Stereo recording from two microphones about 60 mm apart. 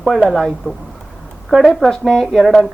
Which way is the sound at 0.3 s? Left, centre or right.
Centre.